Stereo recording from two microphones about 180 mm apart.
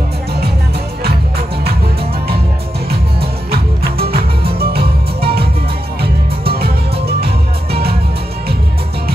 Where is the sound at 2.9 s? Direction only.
60° right (ahead or behind).